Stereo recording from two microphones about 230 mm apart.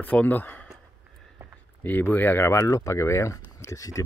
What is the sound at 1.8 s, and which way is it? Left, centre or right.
Speech, centre.